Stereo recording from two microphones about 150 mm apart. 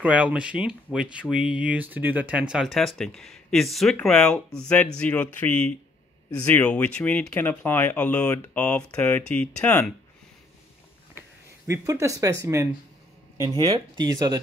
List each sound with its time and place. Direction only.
0.0 s speech: 10° right (ahead or behind); by 9.9 s 10° left (ahead or behind)
11.1 s speech: 20° right (ahead or behind)